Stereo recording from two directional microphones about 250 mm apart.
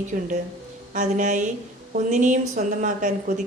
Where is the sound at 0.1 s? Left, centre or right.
Right.